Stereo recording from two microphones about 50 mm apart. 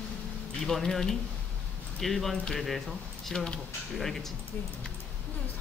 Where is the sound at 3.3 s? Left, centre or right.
Centre.